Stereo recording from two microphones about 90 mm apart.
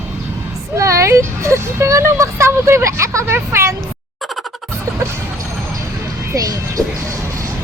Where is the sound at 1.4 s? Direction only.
35° right (ahead or behind).